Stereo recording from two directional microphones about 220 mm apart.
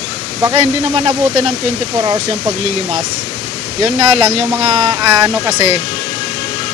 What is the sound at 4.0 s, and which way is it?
Speech, 25° right (ahead or behind).